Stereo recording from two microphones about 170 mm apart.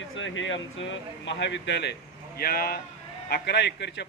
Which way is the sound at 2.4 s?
65° left (ahead or behind).